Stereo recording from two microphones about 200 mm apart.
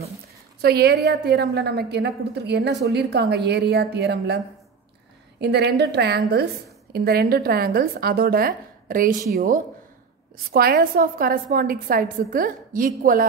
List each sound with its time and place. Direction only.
0.6 s a woman's voice: 50° right (ahead or behind)
5.4 s a woman's voice: 55° right (ahead or behind)
10.5 s a woman's voice: 50° right (ahead or behind)